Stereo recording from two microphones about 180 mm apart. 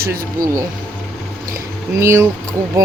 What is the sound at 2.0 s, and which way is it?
Speech, 15° right (ahead or behind).